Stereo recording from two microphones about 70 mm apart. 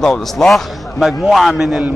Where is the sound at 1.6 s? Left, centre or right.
Centre.